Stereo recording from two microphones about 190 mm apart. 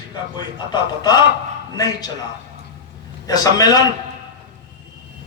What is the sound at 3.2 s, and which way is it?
Speech, 20° left (ahead or behind).